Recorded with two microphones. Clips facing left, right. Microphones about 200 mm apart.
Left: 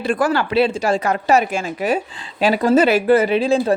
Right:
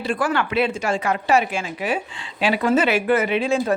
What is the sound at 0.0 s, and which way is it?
Speech, 45° left (ahead or behind).